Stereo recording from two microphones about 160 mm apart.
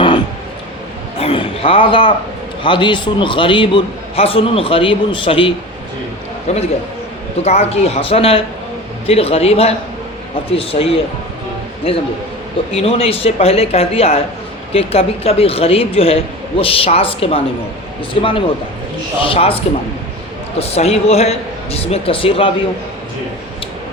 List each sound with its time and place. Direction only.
1.2 s a sound: 35° left (ahead or behind)
2.6 s a man's voice: 30° left (ahead or behind)
12.7 s a man's voice: 40° left (ahead or behind)
20.6 s a man's voice: 40° left (ahead or behind)